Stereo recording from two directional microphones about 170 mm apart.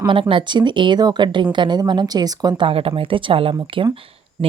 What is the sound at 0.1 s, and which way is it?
A woman's voice, 30° right (ahead or behind).